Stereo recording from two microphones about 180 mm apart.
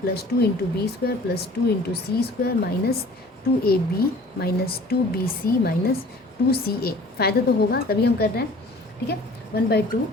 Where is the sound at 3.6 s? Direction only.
60° left (ahead or behind).